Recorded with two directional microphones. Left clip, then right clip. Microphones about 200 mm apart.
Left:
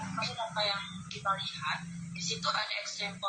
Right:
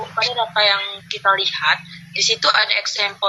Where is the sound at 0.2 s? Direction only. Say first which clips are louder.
Right 16 dB; 45° right (ahead or behind).